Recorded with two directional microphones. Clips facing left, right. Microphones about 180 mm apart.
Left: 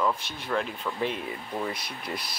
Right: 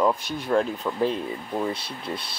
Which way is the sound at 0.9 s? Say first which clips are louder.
Right 5 dB; 20° right (ahead or behind).